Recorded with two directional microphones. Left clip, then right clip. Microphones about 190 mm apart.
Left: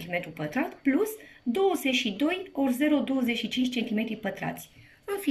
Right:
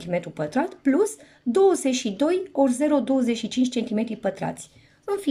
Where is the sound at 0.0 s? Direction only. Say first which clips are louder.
Right 5 dB; 25° right (ahead or behind).